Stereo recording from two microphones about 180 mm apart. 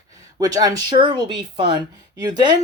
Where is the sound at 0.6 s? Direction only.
25° right (ahead or behind).